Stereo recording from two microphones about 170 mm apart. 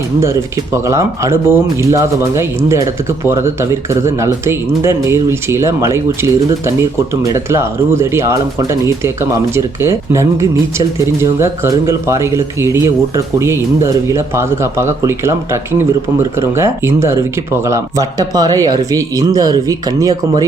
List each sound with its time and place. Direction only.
0.2 s speech: 15° right (ahead or behind)
16.4 s speech: 15° right (ahead or behind)